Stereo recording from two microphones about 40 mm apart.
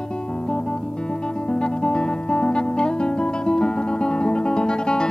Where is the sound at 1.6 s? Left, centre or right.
Left.